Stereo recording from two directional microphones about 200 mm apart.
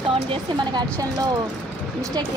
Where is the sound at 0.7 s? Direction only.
20° right (ahead or behind).